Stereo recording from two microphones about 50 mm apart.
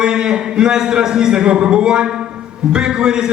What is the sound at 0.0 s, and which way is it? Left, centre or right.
A man's voice, centre.